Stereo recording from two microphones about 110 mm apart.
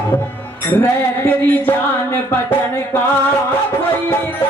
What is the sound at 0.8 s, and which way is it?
Music, 25° left (ahead or behind).